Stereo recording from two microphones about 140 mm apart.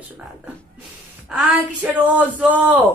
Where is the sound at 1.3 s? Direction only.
10° right (ahead or behind).